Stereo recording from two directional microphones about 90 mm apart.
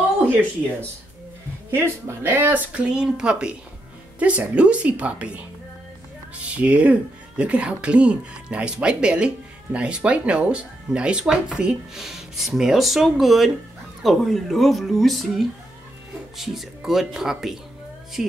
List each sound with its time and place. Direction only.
1.7 s speech: 25° right (ahead or behind)
2.8 s speech: 10° right (ahead or behind)
6.5 s speech: 15° right (ahead or behind)